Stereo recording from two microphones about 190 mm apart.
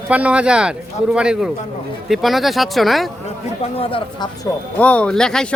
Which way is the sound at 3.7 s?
30° left (ahead or behind).